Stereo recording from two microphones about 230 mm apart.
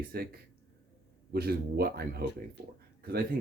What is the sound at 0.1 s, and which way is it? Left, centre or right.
Speech, right.